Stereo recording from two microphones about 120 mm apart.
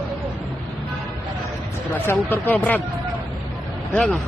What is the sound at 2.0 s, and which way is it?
Speech, 15° left (ahead or behind).